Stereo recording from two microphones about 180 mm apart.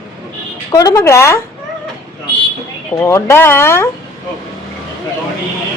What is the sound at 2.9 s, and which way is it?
Speech, 15° left (ahead or behind).